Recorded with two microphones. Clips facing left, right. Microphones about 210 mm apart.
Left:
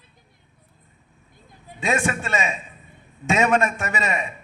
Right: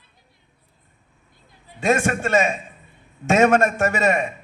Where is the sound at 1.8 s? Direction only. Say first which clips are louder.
Right 4 dB; 50° right (ahead or behind).